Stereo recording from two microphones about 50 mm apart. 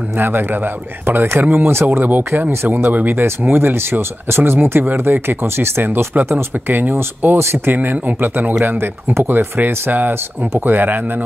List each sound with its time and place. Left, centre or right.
0.2 s speech: right
8.6 s speech: right